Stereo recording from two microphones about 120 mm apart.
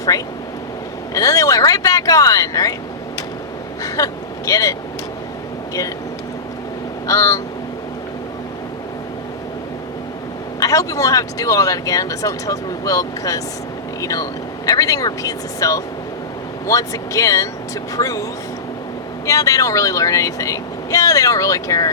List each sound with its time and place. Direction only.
1.1 s speech: 30° left (ahead or behind)
3.8 s speech: 30° left (ahead or behind)
7.1 s speech: 25° left (ahead or behind)
10.6 s speech: 30° left (ahead or behind)